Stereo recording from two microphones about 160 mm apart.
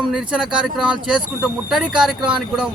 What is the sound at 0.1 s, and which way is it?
A man's voice, 5° right (ahead or behind).